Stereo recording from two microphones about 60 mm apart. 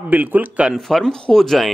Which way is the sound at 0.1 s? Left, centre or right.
Right.